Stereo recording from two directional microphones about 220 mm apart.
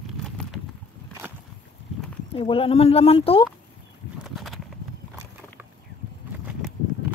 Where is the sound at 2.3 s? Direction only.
25° left (ahead or behind).